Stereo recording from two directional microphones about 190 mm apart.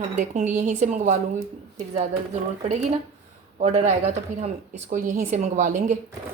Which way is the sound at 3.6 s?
35° right (ahead or behind).